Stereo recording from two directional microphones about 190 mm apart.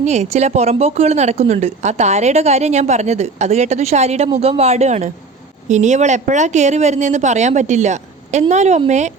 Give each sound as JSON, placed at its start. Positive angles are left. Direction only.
{"t": 0.0, "sound": "a woman's voice", "side_deg": -35}